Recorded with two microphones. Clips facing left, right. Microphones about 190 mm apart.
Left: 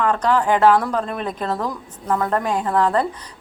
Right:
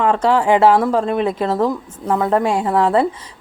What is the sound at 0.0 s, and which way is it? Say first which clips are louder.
A woman's voice: right 3 dB; 25° right (ahead or behind).